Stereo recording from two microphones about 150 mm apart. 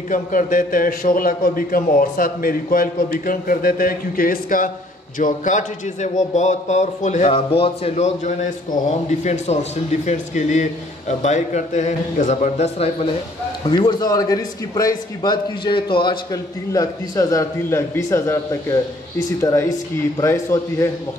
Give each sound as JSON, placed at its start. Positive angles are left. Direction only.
{"t": 0.1, "sound": "a man's voice", "side_deg": 60}
{"t": 5.2, "sound": "a man's voice", "side_deg": 60}
{"t": 13.7, "sound": "a man's voice", "side_deg": 30}